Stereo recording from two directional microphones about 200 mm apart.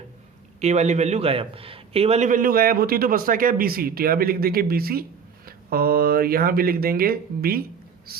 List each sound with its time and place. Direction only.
0.6 s a man's voice: 35° right (ahead or behind); by 7.7 s 50° right (ahead or behind)